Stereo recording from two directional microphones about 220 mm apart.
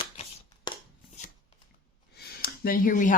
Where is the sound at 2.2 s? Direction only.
45° left (ahead or behind).